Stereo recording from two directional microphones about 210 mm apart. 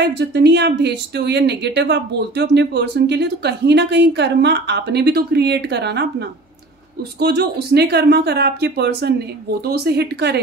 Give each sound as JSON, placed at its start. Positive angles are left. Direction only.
{"t": 0.0, "sound": "speech", "side_deg": -55}